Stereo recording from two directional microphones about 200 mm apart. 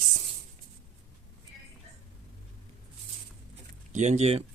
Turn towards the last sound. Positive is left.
turn(degrees=-30)  # may be behind; listen again after turning